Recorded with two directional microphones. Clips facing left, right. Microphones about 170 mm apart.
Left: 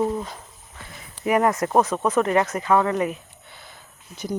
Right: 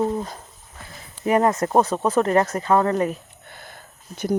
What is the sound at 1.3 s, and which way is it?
Speech, 25° right (ahead or behind).